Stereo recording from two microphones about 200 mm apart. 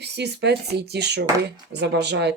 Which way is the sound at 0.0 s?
55° right (ahead or behind).